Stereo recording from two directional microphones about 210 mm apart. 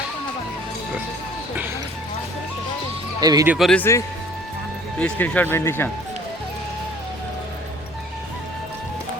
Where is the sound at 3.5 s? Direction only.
Centre (ahead or behind).